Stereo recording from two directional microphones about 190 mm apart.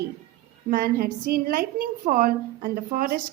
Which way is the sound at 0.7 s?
50° right (ahead or behind).